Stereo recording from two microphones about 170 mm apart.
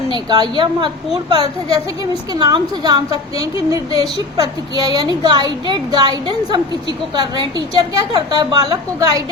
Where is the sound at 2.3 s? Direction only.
25° right (ahead or behind).